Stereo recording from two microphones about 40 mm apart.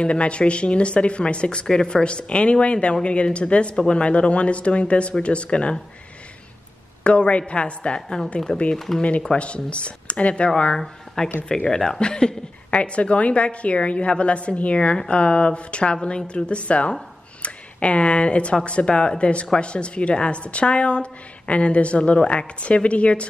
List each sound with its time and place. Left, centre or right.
0.0 s speech: left
3.7 s speech: centre
4.0 s speech: left
7.0 s speech: left
8.7 s speech: centre
9.4 s speech: left
11.4 s a woman's voice: centre